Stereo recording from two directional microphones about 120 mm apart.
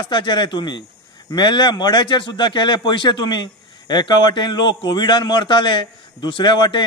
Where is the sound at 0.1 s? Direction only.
40° left (ahead or behind).